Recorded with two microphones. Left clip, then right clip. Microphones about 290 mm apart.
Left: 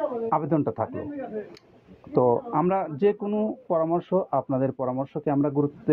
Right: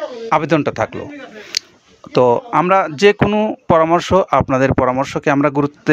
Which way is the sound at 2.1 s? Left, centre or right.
Right.